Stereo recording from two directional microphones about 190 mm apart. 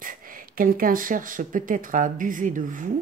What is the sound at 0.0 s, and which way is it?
A woman's voice, 45° right (ahead or behind).